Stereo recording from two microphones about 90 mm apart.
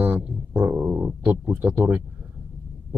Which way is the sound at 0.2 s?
20° right (ahead or behind).